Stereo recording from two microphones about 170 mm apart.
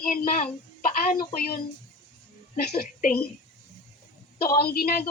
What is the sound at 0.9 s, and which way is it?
Speech, 55° left (ahead or behind).